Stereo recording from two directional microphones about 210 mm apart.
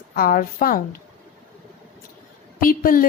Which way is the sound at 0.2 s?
45° left (ahead or behind).